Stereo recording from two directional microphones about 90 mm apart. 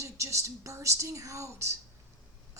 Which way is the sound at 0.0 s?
35° right (ahead or behind).